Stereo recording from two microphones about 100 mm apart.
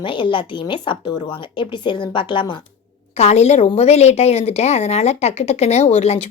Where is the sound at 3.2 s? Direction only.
90° left.